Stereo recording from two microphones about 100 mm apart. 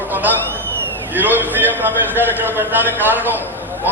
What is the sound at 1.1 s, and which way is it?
A man's voice, 20° right (ahead or behind).